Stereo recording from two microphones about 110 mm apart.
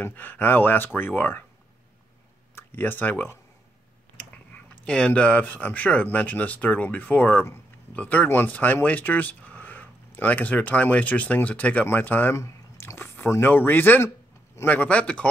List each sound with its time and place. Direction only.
0.0 s speech: 15° left (ahead or behind)
2.5 s speech: 20° left (ahead or behind)
4.8 s speech: 10° left (ahead or behind)